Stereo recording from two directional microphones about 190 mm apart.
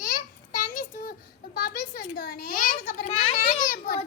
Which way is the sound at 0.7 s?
45° left (ahead or behind).